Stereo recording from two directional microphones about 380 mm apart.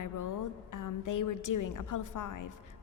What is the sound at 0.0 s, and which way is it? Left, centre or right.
A woman's voice, left.